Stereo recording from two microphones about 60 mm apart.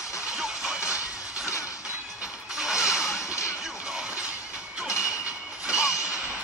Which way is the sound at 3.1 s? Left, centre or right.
Left.